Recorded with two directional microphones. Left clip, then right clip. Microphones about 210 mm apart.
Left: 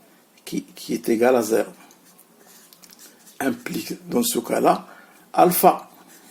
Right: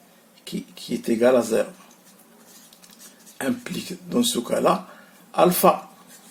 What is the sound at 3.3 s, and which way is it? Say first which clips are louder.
Speech: left 2 dB; 35° left (ahead or behind).